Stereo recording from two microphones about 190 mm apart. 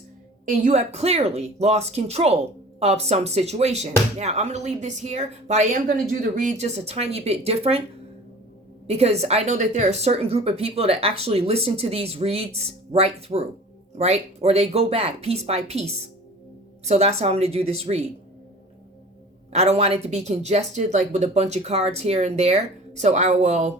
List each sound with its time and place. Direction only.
0.4 s speech: 40° right (ahead or behind)
8.9 s speech: 35° right (ahead or behind)
19.5 s speech: 35° right (ahead or behind)